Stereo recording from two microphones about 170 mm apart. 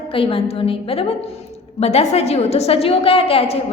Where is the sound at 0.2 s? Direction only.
35° left (ahead or behind).